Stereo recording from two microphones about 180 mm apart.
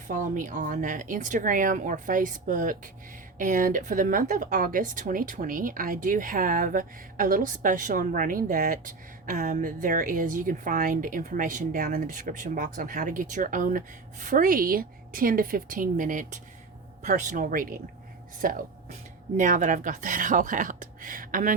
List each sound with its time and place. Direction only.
0.1 s speech: 45° right (ahead or behind)